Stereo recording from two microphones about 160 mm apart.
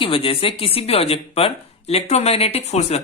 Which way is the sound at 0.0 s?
35° left (ahead or behind).